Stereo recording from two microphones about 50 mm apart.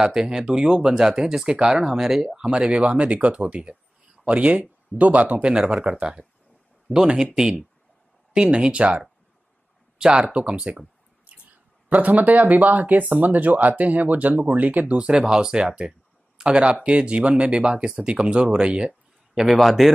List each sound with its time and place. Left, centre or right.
0.0 s speech: centre; by 5.5 s right
5.5 s speech: centre
8.3 s speech: centre
11.3 s a sound: right
11.9 s speech: right
15.0 s speech: centre
19.6 s speech: centre